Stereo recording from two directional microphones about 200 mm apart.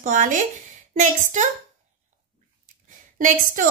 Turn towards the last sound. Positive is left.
turn(degrees=-40)  # may be behind; listen again after turning